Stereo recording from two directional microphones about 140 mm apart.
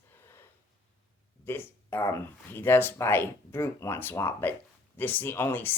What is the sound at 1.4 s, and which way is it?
Speech, 15° left (ahead or behind).